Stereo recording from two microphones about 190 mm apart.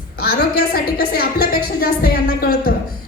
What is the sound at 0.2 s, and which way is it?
A woman's voice, 55° left (ahead or behind).